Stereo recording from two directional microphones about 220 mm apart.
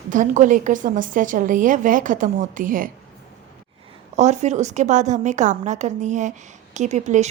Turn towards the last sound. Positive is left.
turn(degrees=-30)  # may be behind; listen again after turning